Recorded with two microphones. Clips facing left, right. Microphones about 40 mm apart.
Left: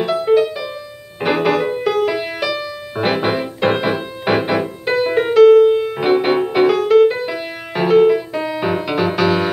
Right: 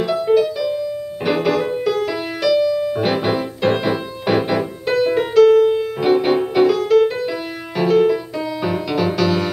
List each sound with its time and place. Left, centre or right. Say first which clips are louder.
0.0 s music: left 1 dB; centre